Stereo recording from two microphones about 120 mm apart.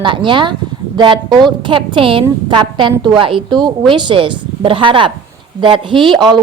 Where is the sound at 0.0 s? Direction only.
40° right (ahead or behind).